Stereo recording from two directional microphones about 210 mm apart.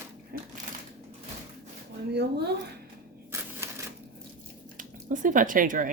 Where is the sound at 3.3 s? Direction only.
10° right (ahead or behind).